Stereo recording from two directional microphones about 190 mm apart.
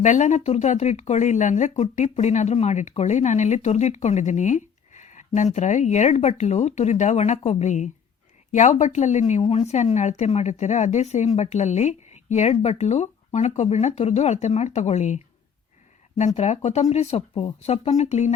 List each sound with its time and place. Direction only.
0.0 s speech: 40° left (ahead or behind)